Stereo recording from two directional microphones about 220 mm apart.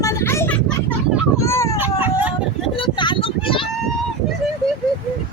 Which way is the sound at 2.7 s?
20° left (ahead or behind).